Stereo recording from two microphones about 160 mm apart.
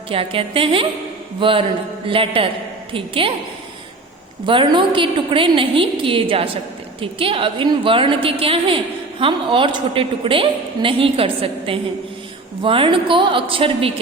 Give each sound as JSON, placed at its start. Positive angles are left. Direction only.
{"t": 0.1, "sound": "a woman's voice", "side_deg": -35}
{"t": 4.4, "sound": "a woman's voice", "side_deg": -30}